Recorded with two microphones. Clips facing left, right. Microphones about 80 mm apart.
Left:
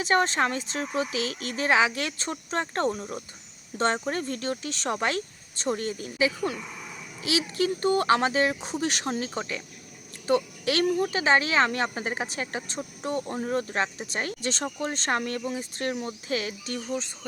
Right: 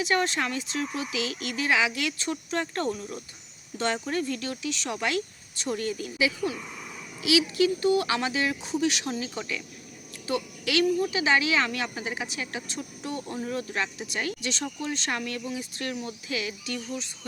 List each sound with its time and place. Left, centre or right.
0.0 s speech: left